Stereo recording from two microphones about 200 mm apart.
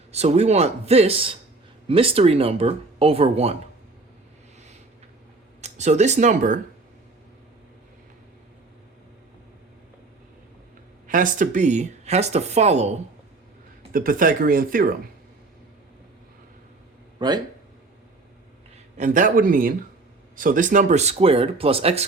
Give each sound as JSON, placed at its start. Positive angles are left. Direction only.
{"t": 0.1, "sound": "speech", "side_deg": -35}
{"t": 5.6, "sound": "speech", "side_deg": -35}
{"t": 11.1, "sound": "speech", "side_deg": -40}
{"t": 13.9, "sound": "speech", "side_deg": -45}
{"t": 17.2, "sound": "speech", "side_deg": -20}
{"t": 18.9, "sound": "speech", "side_deg": -40}